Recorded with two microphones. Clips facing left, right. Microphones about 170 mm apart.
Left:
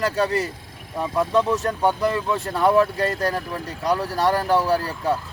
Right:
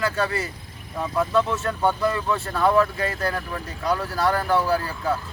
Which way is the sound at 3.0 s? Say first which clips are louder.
Left 3 dB; 35° left (ahead or behind).